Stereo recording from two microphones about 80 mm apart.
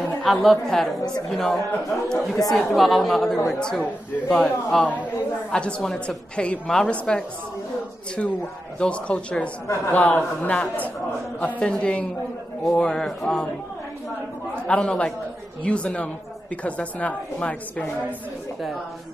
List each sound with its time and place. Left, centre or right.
0.2 s a woman's voice: centre
14.5 s a woman's voice: centre